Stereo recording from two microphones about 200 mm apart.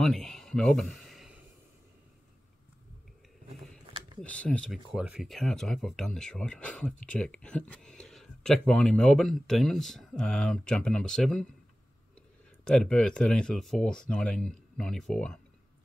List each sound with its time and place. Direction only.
0.0 s a sound: centre (ahead or behind)
4.2 s speech: 5° left (ahead or behind)
12.6 s speech: 5° left (ahead or behind)